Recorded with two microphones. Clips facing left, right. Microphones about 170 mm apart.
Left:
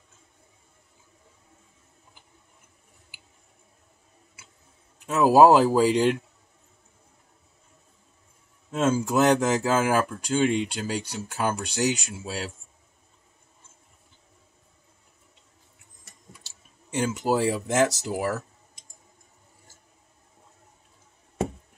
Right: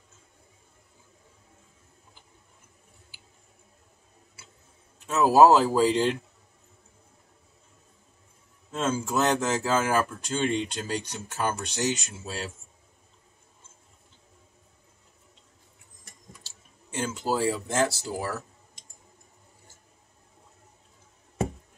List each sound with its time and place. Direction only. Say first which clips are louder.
4.9 s speech: left 2 dB; 10° left (ahead or behind)
8.7 s speech: left 4 dB; 10° left (ahead or behind)
16.4 s speech: left 1 dB; 15° left (ahead or behind)